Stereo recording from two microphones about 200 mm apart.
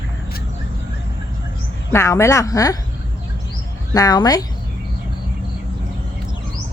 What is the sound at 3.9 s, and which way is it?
Speech, 20° left (ahead or behind).